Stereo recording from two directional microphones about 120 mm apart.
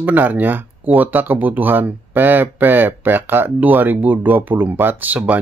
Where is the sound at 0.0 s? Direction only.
15° right (ahead or behind).